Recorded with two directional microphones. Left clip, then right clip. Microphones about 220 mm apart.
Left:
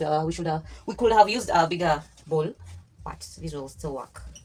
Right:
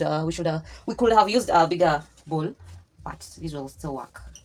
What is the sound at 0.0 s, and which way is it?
Speech, 45° right (ahead or behind).